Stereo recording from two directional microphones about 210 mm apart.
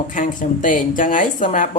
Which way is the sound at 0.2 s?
40° left (ahead or behind).